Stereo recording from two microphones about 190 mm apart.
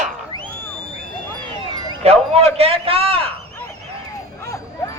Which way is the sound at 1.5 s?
25° right (ahead or behind).